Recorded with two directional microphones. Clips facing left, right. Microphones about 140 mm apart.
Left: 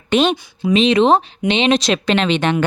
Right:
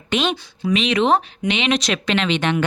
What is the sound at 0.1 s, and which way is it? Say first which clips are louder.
Speech: left 6 dB; 30° left (ahead or behind).